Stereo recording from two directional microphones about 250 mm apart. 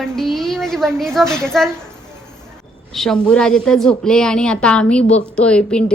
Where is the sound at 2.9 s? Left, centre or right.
Centre.